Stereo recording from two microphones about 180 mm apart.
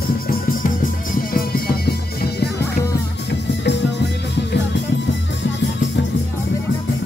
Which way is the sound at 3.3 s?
75° left (ahead or behind).